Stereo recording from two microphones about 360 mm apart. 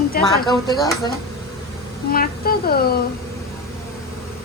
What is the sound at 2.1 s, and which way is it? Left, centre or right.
Speech, left.